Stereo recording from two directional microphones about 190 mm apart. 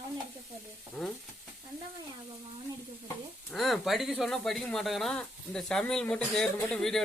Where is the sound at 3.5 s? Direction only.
Centre (ahead or behind).